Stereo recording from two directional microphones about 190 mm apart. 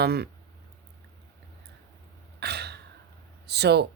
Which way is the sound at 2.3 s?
60° right (ahead or behind).